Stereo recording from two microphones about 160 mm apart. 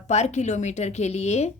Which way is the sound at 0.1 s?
45° left (ahead or behind).